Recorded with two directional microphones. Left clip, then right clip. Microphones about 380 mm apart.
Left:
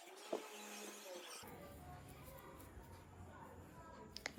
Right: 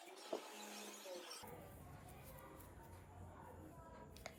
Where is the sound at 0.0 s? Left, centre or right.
Centre.